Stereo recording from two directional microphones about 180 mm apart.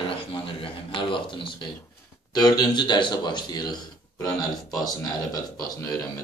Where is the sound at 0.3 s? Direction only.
30° left (ahead or behind).